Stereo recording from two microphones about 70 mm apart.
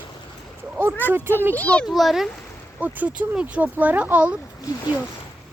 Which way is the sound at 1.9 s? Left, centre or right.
Centre.